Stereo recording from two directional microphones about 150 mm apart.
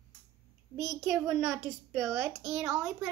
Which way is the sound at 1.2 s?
20° right (ahead or behind).